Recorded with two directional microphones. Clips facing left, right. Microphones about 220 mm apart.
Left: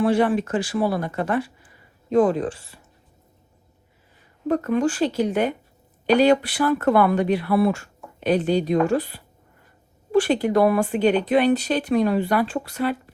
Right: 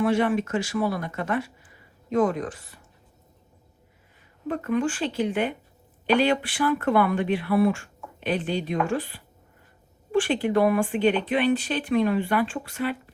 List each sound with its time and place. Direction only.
0.0 s speech: 35° left (ahead or behind)
4.4 s speech: 40° left (ahead or behind)